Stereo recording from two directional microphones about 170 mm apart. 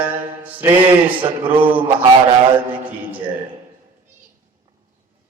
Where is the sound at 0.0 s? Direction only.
10° right (ahead or behind).